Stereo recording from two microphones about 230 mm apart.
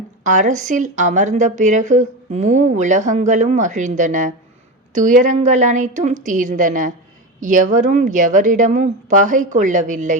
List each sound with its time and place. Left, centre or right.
0.3 s speech: right